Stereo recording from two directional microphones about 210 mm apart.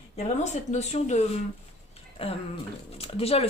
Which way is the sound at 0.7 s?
35° left (ahead or behind).